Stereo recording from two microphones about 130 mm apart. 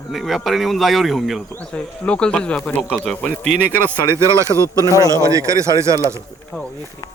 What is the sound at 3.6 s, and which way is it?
Speech, 20° right (ahead or behind).